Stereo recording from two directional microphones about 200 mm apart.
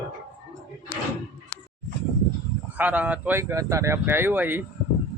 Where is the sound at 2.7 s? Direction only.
10° right (ahead or behind).